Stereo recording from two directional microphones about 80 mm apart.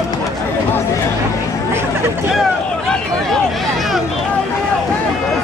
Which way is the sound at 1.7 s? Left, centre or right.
Right.